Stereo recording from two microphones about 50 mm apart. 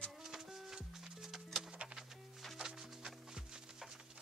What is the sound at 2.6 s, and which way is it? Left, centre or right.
Music, centre.